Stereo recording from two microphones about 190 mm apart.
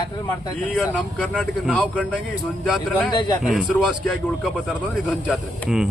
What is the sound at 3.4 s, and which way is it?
A man's voice, centre (ahead or behind).